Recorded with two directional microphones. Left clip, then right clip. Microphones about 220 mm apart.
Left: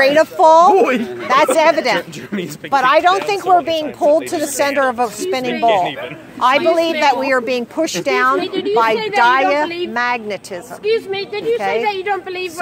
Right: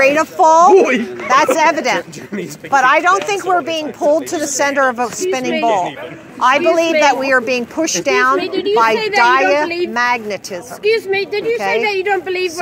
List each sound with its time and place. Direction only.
0.0 s speech: 5° left (ahead or behind)
0.7 s a woman's voice: 15° right (ahead or behind)
1.2 s speech: 5° left (ahead or behind)
11.5 s speech: centre (ahead or behind)
11.9 s a woman's voice: 35° right (ahead or behind)